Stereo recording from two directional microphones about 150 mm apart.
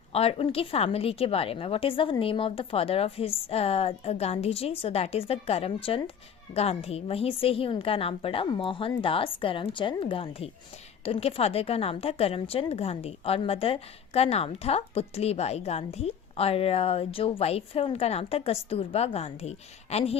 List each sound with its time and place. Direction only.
0.1 s a woman's voice: 40° left (ahead or behind)